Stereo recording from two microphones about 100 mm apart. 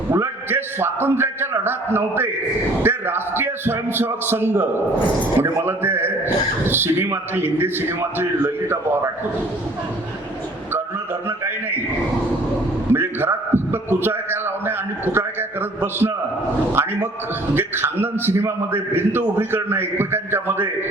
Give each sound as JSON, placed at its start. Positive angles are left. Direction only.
{"t": 0.1, "sound": "a man's voice", "side_deg": -25}
{"t": 12.9, "sound": "a man's voice", "side_deg": -20}